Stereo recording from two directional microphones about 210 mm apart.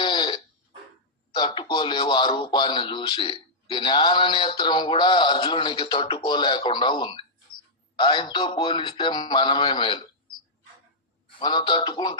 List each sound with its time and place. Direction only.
0.0 s a sound: 20° left (ahead or behind)
1.3 s speech: 20° left (ahead or behind)
11.3 s speech: 20° left (ahead or behind)